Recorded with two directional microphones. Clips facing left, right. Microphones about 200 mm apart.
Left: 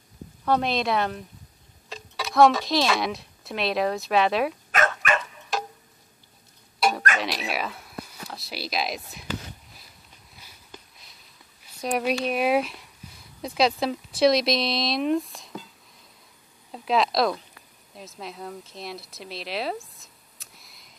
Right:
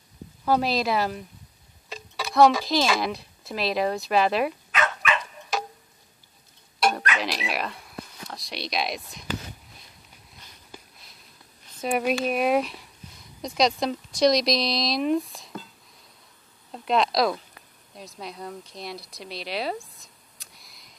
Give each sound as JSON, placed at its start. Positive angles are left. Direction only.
{"t": 0.5, "sound": "speech", "side_deg": -5}
{"t": 4.6, "sound": "dog", "side_deg": 45}
{"t": 7.2, "sound": "speech", "side_deg": 0}
{"t": 10.7, "sound": "a sound", "side_deg": 0}
{"t": 11.8, "sound": "speech", "side_deg": 0}
{"t": 16.7, "sound": "speech", "side_deg": 0}